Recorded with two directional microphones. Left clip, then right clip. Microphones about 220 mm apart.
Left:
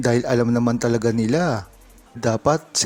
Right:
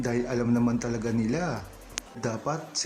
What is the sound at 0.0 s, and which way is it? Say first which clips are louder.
Speech: left 9 dB; 40° left (ahead or behind).